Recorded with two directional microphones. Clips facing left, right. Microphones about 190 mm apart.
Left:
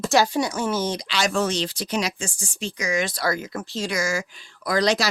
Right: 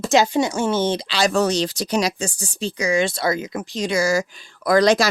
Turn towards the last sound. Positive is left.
turn(degrees=-50)  # may be behind; listen again after turning